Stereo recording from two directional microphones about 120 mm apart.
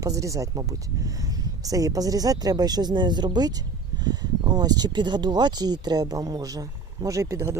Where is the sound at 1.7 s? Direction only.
30° right (ahead or behind).